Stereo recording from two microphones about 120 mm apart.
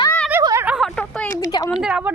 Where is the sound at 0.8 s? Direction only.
5° left (ahead or behind).